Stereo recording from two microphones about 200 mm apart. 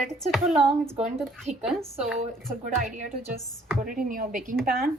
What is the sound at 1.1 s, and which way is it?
Speech, centre (ahead or behind).